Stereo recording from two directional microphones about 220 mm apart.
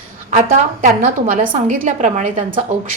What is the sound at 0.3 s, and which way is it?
A woman's voice, 35° right (ahead or behind).